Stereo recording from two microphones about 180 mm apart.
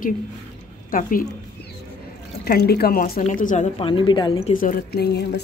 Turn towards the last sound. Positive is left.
turn(degrees=65)  # may be behind; listen again after turning